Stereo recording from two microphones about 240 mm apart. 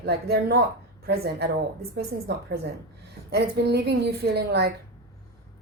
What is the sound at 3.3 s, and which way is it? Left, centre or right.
A woman's voice, right.